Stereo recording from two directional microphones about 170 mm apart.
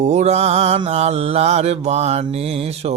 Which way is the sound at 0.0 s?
40° right (ahead or behind).